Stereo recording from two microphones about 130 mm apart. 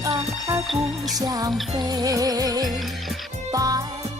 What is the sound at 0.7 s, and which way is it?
Music, centre (ahead or behind).